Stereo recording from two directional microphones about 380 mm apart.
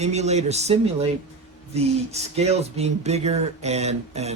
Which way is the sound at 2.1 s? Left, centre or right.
Centre.